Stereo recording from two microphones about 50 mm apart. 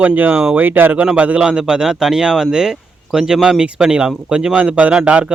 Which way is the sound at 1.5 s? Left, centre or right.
Centre.